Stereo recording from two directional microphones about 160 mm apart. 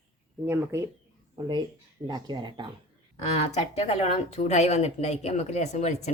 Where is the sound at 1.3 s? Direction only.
25° right (ahead or behind).